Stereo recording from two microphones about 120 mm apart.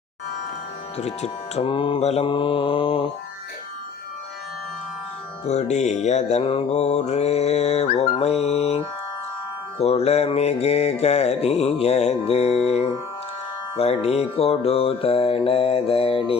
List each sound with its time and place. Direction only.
0.9 s mantra: 65° left (ahead or behind)
1.6 s music: 45° left (ahead or behind)
2.0 s mantra: 60° left (ahead or behind)
2.2 s music: 45° left (ahead or behind)
5.5 s music: 70° left (ahead or behind)
6.4 s mantra: 50° left (ahead or behind)
9.8 s mantra: 60° left (ahead or behind)
13.7 s music: 60° left (ahead or behind)